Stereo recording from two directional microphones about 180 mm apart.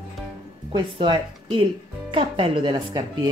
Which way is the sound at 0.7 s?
25° right (ahead or behind).